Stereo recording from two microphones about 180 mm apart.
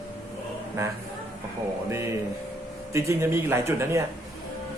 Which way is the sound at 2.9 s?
15° right (ahead or behind).